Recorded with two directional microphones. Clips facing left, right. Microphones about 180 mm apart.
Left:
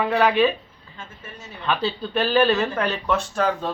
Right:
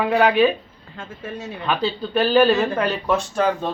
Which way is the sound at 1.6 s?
10° right (ahead or behind).